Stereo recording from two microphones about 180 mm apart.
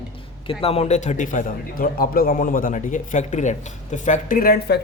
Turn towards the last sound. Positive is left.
turn(degrees=60)  # may be behind; listen again after turning